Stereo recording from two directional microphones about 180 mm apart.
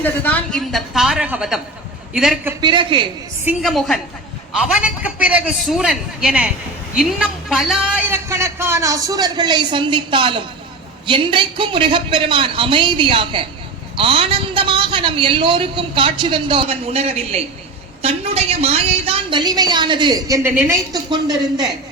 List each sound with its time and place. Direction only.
0.0 s a man's voice: 10° left (ahead or behind); by 2.6 s 5° right (ahead or behind)
2.6 s a man's voice: 25° right (ahead or behind)
3.6 s a man's voice: centre (ahead or behind); by 21.7 s 20° right (ahead or behind)